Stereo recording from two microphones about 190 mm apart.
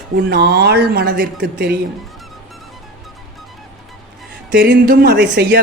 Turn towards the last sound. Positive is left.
turn(degrees=-55)  # may be behind; listen again after turning